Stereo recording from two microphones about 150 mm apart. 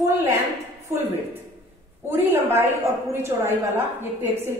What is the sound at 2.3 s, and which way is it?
Speech, 15° right (ahead or behind).